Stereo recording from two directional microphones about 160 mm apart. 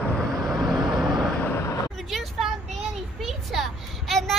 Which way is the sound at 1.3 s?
15° left (ahead or behind).